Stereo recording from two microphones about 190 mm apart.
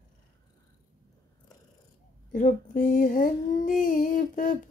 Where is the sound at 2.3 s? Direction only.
45° left (ahead or behind).